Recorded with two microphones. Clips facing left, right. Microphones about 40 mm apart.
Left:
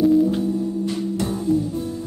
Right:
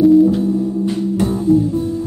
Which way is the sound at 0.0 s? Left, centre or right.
Centre.